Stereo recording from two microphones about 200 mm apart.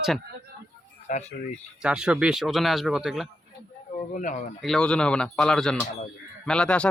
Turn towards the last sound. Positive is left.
turn(degrees=5)  # may be behind; listen again after turning